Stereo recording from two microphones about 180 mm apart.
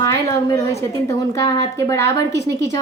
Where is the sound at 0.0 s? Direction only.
20° left (ahead or behind).